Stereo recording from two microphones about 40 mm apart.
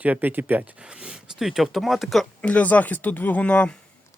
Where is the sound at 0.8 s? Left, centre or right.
Right.